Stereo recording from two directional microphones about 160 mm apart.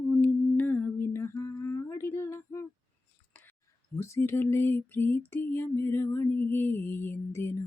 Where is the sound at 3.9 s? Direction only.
15° left (ahead or behind).